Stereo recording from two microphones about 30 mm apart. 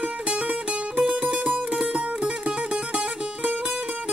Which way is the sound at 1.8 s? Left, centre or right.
Right.